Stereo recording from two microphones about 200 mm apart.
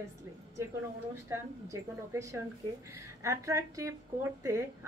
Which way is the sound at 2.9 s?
15° right (ahead or behind).